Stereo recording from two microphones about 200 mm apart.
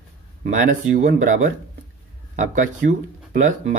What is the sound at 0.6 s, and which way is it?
Speech, 40° right (ahead or behind).